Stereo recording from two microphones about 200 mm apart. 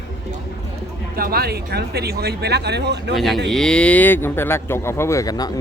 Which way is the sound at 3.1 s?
Centre (ahead or behind).